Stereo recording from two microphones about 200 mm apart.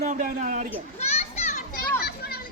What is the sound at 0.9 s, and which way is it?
Children playing, 35° left (ahead or behind).